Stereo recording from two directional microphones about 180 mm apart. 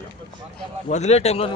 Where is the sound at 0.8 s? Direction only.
40° left (ahead or behind).